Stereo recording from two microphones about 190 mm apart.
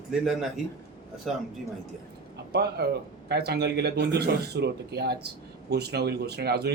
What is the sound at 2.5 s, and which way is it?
Speech, 60° right (ahead or behind).